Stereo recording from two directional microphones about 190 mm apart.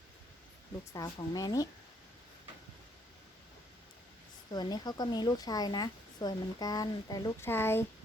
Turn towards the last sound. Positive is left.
turn(degrees=10)  # may be behind; listen again after turning